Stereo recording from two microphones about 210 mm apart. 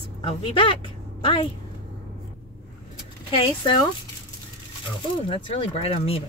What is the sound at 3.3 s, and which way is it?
Speech, 25° left (ahead or behind).